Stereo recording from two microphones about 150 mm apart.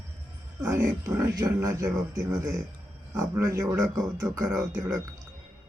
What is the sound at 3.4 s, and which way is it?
Speech, 20° right (ahead or behind).